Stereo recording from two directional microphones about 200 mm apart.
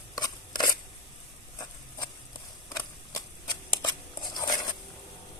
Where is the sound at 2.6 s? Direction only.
15° left (ahead or behind).